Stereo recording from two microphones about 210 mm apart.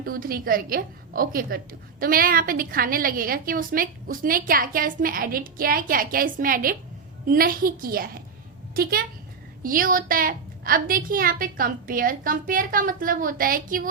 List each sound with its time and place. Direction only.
0.0 s a woman's voice: 45° right (ahead or behind)